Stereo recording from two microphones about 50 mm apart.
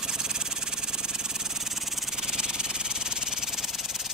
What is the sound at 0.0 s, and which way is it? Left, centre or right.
Engine, centre.